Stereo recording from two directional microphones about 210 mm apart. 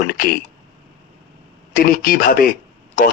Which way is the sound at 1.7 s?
40° left (ahead or behind).